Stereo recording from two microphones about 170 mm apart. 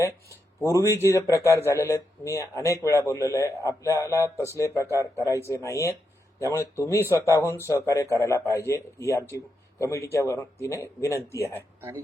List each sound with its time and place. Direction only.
0.0 s speech: 15° left (ahead or behind)
11.8 s speech: 10° right (ahead or behind)